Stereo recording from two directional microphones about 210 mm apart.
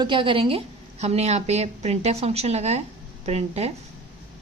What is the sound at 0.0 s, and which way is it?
A woman's voice, 25° right (ahead or behind).